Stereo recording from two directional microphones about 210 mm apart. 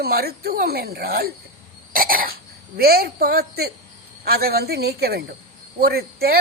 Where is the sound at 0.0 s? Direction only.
50° right (ahead or behind).